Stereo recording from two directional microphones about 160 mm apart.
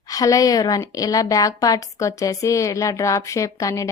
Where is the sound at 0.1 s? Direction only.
20° left (ahead or behind).